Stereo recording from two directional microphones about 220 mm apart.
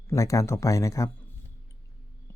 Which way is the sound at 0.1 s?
15° left (ahead or behind).